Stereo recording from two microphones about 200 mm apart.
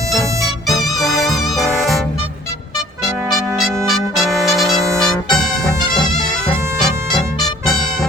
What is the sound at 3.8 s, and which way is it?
Trumpet, centre (ahead or behind).